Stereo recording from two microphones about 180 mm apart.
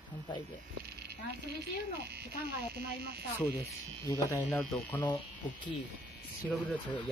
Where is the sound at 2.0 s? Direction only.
65° right (ahead or behind).